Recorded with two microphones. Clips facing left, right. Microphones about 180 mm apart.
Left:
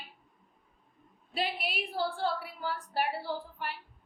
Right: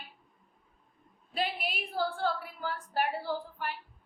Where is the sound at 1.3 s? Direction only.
45° right (ahead or behind).